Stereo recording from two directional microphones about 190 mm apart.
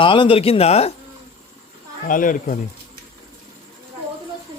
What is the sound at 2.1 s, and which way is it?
Speech, 45° left (ahead or behind).